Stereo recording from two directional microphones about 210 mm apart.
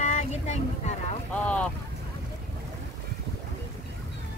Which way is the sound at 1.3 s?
5° left (ahead or behind).